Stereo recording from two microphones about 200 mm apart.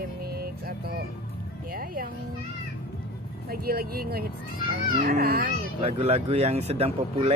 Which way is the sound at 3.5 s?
50° right (ahead or behind).